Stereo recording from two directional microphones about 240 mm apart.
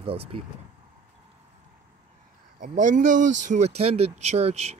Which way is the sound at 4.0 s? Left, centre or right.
Right.